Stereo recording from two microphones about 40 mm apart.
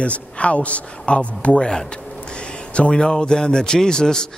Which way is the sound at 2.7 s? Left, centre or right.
Left.